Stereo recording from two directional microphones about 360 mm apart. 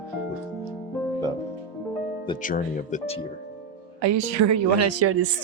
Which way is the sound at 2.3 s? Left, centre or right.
Left.